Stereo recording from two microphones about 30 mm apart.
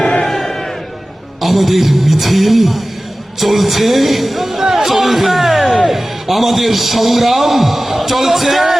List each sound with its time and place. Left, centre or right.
0.0 s crowd: left
0.3 s crowd: centre
1.4 s a man's voice: centre
5.0 s a sound: centre
5.9 s a man's voice: centre